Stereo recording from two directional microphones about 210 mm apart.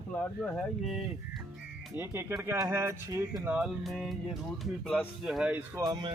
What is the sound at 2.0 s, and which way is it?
Speech, 10° right (ahead or behind).